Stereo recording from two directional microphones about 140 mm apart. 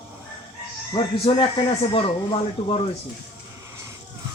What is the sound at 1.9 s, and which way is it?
Speech, 40° left (ahead or behind).